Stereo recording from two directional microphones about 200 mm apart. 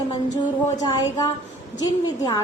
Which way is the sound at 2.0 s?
20° left (ahead or behind).